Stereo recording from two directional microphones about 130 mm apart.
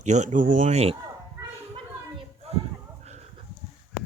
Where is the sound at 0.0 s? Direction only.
65° right (ahead or behind).